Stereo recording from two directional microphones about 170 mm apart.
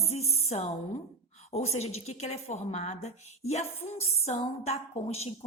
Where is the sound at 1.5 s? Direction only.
40° left (ahead or behind).